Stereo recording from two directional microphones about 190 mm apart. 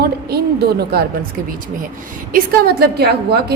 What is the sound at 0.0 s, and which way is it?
A woman's voice, 55° right (ahead or behind).